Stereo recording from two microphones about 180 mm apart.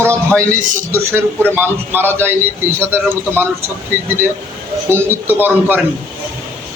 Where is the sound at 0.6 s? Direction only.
45° right (ahead or behind).